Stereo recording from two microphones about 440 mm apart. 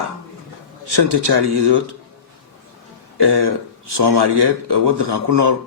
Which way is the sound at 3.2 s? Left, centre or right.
Right.